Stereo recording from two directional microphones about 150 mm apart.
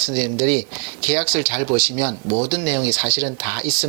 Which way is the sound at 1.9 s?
35° right (ahead or behind).